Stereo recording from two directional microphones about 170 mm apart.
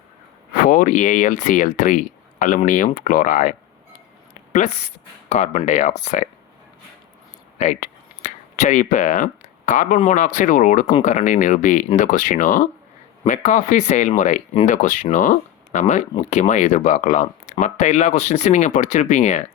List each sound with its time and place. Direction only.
0.5 s speech: 50° left (ahead or behind)
5.3 s speech: 45° left (ahead or behind)
7.6 s a sound: 45° left (ahead or behind)
10.1 s speech: 45° left (ahead or behind)